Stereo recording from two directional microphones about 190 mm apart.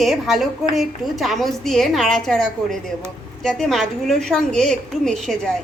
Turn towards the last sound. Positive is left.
turn(degrees=0)  # may be behind; listen again after turning